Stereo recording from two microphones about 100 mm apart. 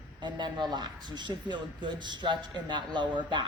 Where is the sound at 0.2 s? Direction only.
50° right (ahead or behind).